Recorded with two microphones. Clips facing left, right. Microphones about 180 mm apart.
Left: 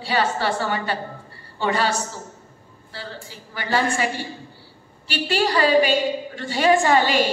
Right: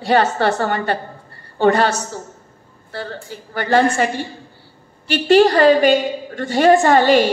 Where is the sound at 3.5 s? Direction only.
50° right (ahead or behind).